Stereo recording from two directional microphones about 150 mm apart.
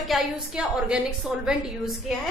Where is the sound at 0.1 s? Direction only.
5° right (ahead or behind).